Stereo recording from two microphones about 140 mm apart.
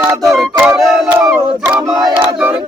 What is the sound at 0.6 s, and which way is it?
Music, 15° right (ahead or behind).